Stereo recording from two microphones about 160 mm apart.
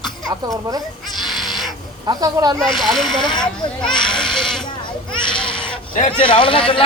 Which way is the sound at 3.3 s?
30° left (ahead or behind).